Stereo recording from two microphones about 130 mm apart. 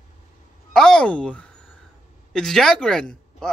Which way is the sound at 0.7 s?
5° left (ahead or behind).